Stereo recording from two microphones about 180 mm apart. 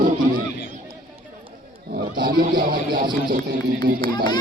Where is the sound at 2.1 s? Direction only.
55° right (ahead or behind).